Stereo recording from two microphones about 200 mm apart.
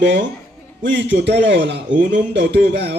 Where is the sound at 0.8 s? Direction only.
65° right (ahead or behind).